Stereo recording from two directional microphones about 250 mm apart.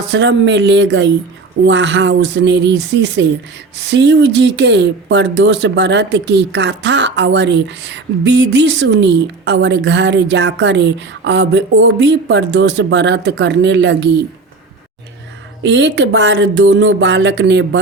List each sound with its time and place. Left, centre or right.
0.1 s speech: right
15.6 s speech: right